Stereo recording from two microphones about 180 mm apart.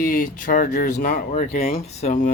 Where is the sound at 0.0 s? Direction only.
50° left (ahead or behind).